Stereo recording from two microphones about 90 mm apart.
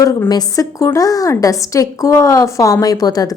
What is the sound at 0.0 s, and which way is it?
A woman's voice, 40° left (ahead or behind).